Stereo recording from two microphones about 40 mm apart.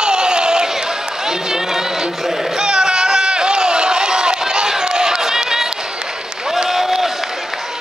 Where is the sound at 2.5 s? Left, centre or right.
Centre.